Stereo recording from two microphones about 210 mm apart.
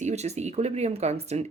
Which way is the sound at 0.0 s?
30° right (ahead or behind).